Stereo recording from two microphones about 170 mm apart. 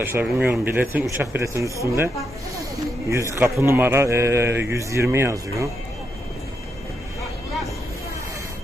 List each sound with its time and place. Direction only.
0.0 s speech: 10° right (ahead or behind)
3.1 s speech: 15° right (ahead or behind)